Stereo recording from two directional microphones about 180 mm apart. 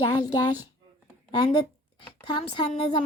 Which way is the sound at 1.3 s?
30° left (ahead or behind).